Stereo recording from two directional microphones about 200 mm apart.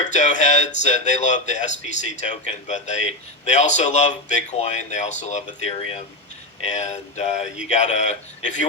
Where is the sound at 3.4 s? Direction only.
35° left (ahead or behind).